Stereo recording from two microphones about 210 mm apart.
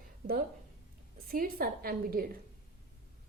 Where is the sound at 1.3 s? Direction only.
45° right (ahead or behind).